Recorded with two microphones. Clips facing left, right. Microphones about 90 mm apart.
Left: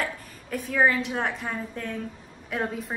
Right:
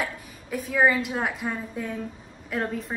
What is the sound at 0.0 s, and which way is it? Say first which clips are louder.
A woman's voice: even; 5° right (ahead or behind).